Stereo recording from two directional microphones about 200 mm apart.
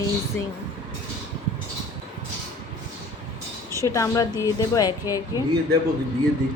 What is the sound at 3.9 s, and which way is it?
Speech, 15° left (ahead or behind).